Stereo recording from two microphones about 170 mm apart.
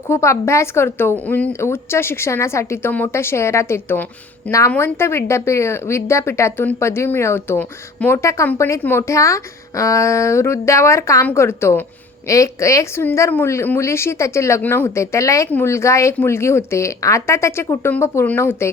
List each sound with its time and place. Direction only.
0.1 s a woman's voice: 15° left (ahead or behind)